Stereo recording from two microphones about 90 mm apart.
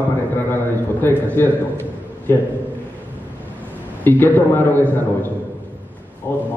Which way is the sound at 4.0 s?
20° left (ahead or behind).